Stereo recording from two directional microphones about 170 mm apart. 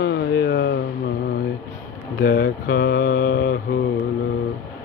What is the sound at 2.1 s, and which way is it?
Mantra, 60° left (ahead or behind).